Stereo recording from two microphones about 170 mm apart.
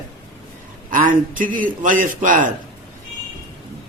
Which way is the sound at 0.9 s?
50° right (ahead or behind).